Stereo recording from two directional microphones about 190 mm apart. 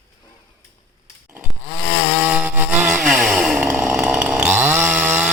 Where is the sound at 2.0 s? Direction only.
5° right (ahead or behind).